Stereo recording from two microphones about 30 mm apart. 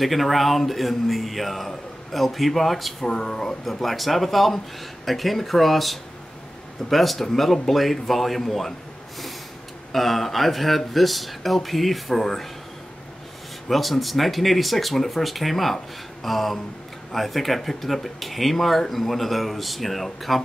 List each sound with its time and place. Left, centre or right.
0.0 s speech: centre
3.1 s speech: left
3.6 s speech: centre
9.9 s speech: centre
13.7 s speech: centre